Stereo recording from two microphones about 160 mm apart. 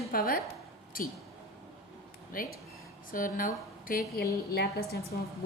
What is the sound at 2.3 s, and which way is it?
A woman's voice, 60° left (ahead or behind).